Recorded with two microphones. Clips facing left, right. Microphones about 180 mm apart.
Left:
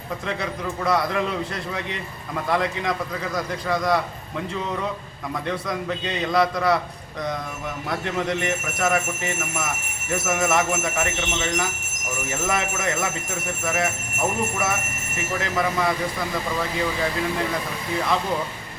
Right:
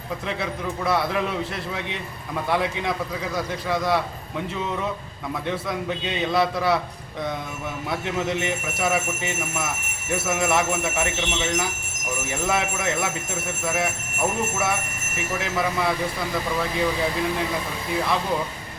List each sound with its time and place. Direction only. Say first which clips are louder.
0.9 s speech: left 1 dB; 5° right (ahead or behind)
5.5 s speech: even; 5° right (ahead or behind)
7.9 s speech: left 1 dB; 5° right (ahead or behind)
10.1 s speech: left 1 dB; 5° right (ahead or behind)